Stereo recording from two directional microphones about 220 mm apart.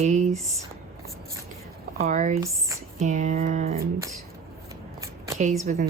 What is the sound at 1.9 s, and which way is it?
Speech, 35° right (ahead or behind).